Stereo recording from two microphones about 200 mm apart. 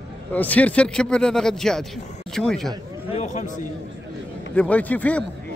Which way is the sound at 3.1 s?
35° left (ahead or behind).